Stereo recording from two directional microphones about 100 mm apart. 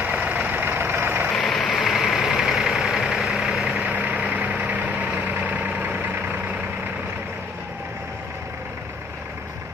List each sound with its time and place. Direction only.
0.0 s vehicle: 15° right (ahead or behind)
1.3 s vehicle: 5° left (ahead or behind)
3.7 s vehicle: 15° right (ahead or behind)